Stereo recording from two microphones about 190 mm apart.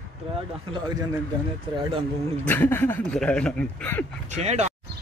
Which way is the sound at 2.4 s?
10° left (ahead or behind).